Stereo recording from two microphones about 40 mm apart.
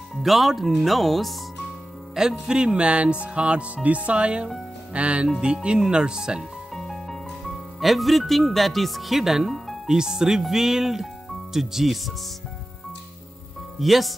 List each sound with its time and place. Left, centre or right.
0.1 s speech: centre
2.1 s speech: centre
6.7 s music: centre
9.8 s speech: centre
13.7 s speech: centre